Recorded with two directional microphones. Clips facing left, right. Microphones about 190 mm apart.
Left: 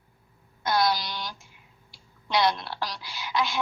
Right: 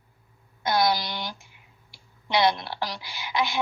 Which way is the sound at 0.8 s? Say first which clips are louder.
Right 2 dB; 20° right (ahead or behind).